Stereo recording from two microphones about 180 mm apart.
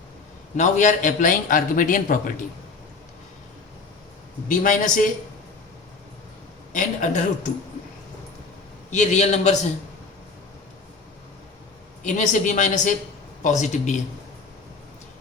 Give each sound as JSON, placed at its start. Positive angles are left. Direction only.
{"t": 0.5, "sound": "a man's voice", "side_deg": 40}
{"t": 4.4, "sound": "a man's voice", "side_deg": 45}
{"t": 6.7, "sound": "a man's voice", "side_deg": 45}
{"t": 8.9, "sound": "a man's voice", "side_deg": 40}
{"t": 12.0, "sound": "a man's voice", "side_deg": 45}